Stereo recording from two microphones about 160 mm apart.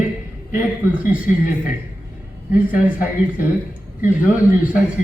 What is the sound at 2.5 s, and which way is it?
Speech, 60° left (ahead or behind).